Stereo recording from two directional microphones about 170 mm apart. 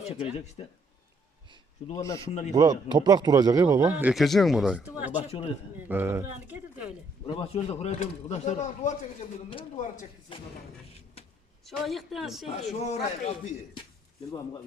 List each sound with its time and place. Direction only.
0.0 s a man's voice: 35° left (ahead or behind)
1.9 s speech: 20° left (ahead or behind)
2.5 s speech: 20° right (ahead or behind)
3.9 s speech: 5° right (ahead or behind)
7.3 s speech: 35° left (ahead or behind)
10.3 s a man's voice: 30° left (ahead or behind)
10.9 s vehicle: 35° left (ahead or behind)
11.6 s speech: centre (ahead or behind)
12.5 s a man's voice: 40° left (ahead or behind)
14.3 s speech: 20° left (ahead or behind)